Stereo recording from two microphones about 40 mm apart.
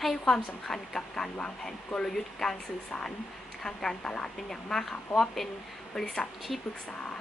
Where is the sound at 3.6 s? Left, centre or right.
Centre.